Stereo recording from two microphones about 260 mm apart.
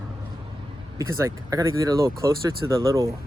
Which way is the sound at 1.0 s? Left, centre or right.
Centre.